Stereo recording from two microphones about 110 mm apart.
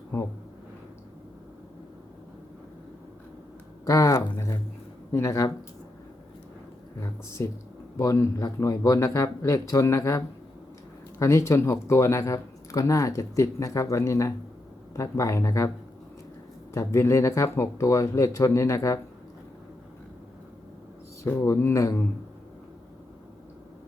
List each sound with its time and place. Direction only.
3.8 s speech: 30° left (ahead or behind)
7.0 s speech: 25° left (ahead or behind)
16.7 s speech: 25° left (ahead or behind)
21.2 s speech: 25° left (ahead or behind)